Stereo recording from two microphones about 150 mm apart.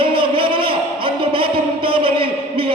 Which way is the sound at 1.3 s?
35° right (ahead or behind).